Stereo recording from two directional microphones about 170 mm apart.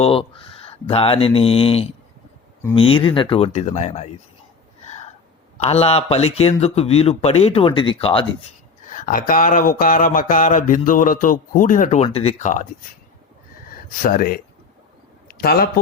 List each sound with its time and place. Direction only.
0.0 s speech: 35° left (ahead or behind)
5.5 s speech: 35° left (ahead or behind)
8.9 s a sound: 50° left (ahead or behind)
12.0 s speech: 35° left (ahead or behind)
14.0 s speech: 55° left (ahead or behind)